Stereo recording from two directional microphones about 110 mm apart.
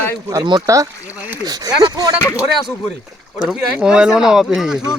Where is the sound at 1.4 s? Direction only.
35° right (ahead or behind).